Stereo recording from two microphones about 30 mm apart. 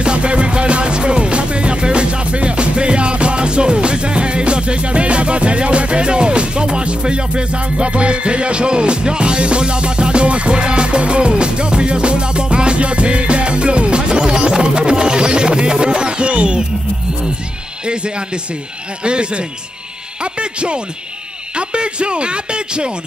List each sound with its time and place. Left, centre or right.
0.0 s music: right
17.8 s speech: right